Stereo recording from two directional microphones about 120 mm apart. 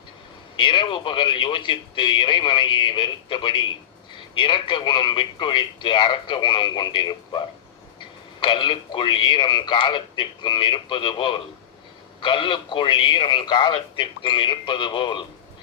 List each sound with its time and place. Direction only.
0.5 s a man's voice: 45° left (ahead or behind)